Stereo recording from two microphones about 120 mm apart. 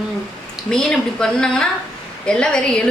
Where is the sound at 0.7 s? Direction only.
5° left (ahead or behind).